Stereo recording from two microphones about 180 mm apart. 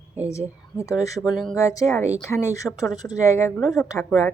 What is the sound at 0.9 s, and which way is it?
A woman's voice, 20° left (ahead or behind).